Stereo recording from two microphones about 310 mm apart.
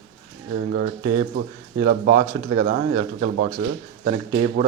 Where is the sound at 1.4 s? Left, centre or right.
Right.